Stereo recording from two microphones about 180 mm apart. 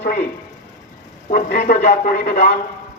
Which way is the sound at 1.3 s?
60° left (ahead or behind).